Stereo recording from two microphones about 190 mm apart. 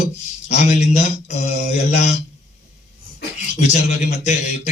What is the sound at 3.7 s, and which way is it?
A man's voice, 40° left (ahead or behind).